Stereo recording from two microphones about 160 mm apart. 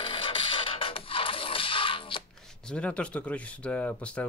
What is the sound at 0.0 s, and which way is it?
Music, 30° left (ahead or behind).